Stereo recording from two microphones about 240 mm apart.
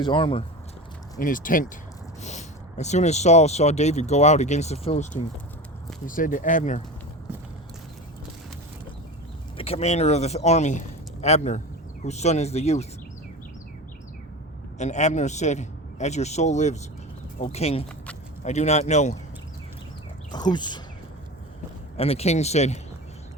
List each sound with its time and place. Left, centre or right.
0.0 s speech: centre
1.2 s speech: left
9.6 s speech: left
14.8 s speech: left
20.3 s speech: centre
21.9 s speech: left